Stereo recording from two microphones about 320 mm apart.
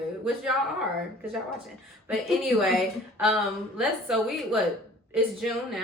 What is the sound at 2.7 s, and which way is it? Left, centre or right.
A woman's voice, centre.